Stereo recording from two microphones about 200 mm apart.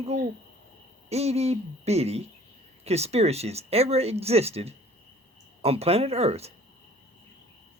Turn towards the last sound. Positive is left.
turn(degrees=-30)  # may be behind; listen again after turning